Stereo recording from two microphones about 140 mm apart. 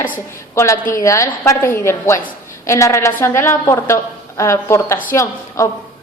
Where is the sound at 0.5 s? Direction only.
20° left (ahead or behind).